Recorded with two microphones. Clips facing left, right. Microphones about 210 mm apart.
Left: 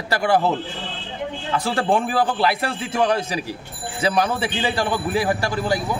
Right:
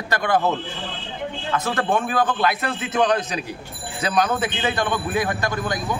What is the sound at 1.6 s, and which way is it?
A man's voice, 30° left (ahead or behind).